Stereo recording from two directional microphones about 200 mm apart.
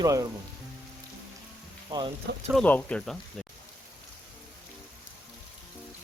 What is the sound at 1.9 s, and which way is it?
Speech, 25° right (ahead or behind).